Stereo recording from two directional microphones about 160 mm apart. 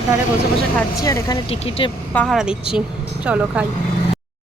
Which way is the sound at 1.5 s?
35° left (ahead or behind).